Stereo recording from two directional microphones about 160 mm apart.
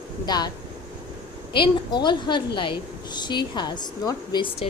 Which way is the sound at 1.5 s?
30° left (ahead or behind).